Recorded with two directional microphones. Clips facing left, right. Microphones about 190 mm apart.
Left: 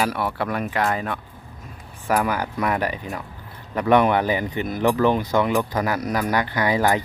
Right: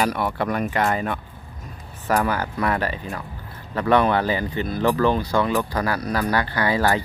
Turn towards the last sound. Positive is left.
turn(degrees=15)  # may be behind; listen again after turning